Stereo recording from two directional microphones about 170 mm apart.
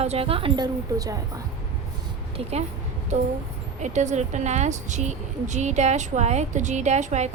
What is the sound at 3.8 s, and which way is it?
A woman's voice, 45° right (ahead or behind).